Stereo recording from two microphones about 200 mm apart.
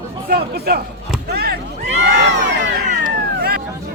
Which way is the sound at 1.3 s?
50° right (ahead or behind).